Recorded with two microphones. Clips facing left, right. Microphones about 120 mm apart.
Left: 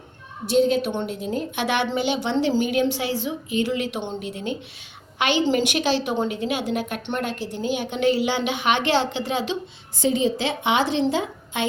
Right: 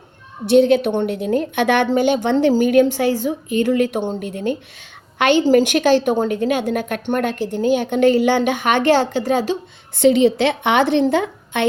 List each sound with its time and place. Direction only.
0.4 s a woman's voice: 65° right (ahead or behind); by 9.6 s 45° right (ahead or behind)
10.0 s a woman's voice: 70° right (ahead or behind)